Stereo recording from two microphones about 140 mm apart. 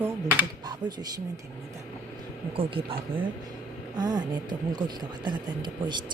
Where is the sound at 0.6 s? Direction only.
30° right (ahead or behind).